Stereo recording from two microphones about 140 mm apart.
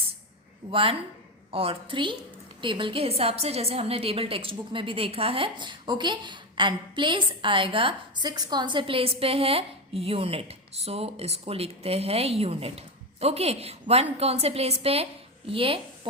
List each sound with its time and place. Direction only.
0.7 s a woman's voice: 40° right (ahead or behind)